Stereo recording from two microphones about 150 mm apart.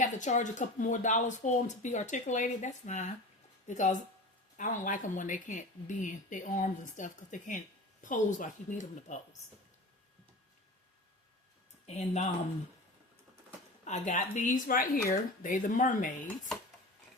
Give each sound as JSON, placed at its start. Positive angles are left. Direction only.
{"t": 0.0, "sound": "speech", "side_deg": 55}
{"t": 11.9, "sound": "speech", "side_deg": 45}
{"t": 13.8, "sound": "speech", "side_deg": 50}